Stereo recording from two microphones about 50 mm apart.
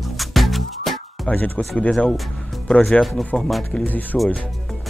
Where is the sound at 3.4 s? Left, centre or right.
Centre.